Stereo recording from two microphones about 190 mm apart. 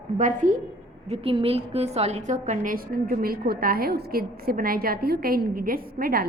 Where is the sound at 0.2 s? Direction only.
40° right (ahead or behind).